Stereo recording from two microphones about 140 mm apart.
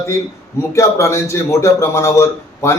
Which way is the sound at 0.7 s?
20° left (ahead or behind).